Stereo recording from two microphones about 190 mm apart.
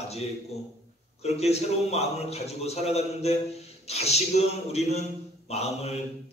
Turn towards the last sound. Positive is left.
turn(degrees=35)  # may be behind; listen again after turning